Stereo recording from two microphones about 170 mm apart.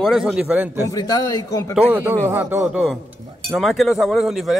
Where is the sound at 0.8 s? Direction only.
20° left (ahead or behind).